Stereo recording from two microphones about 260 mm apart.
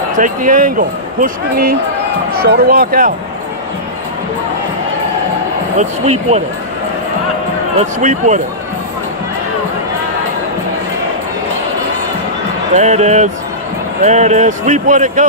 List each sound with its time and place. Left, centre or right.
0.2 s speech: right
5.8 s speech: right
7.8 s speech: right
12.7 s speech: right